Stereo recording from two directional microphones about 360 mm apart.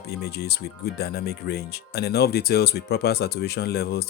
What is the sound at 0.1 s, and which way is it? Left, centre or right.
Speech, left.